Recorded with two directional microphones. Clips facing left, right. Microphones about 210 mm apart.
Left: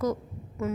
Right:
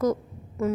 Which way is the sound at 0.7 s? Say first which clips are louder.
Right 5 dB; 35° right (ahead or behind).